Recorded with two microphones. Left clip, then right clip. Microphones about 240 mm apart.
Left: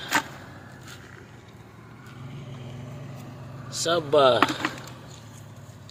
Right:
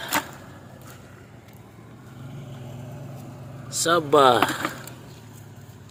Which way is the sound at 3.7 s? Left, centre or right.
Centre.